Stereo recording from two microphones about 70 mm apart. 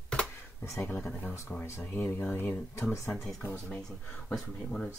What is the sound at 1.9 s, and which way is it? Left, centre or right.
Speech, left.